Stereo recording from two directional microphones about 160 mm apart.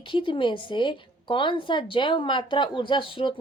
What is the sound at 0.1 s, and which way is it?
A woman's voice, 30° left (ahead or behind).